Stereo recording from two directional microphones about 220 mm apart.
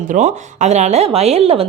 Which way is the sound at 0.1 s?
30° right (ahead or behind).